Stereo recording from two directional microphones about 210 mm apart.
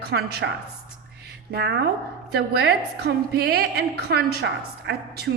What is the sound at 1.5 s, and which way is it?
A woman's voice, 50° right (ahead or behind).